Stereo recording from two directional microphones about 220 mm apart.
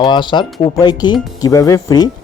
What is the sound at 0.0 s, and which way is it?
Speech, 20° left (ahead or behind).